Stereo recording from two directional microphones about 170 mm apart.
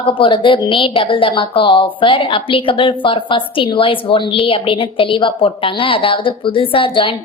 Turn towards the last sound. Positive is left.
turn(degrees=30)  # may be behind; listen again after turning